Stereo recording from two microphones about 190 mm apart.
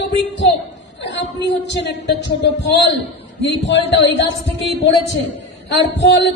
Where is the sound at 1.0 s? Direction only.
65° left (ahead or behind).